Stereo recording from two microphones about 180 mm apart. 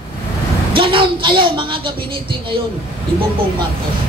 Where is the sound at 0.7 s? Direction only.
30° right (ahead or behind).